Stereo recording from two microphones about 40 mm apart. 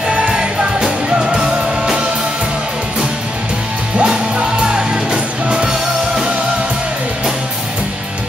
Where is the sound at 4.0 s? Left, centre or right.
Right.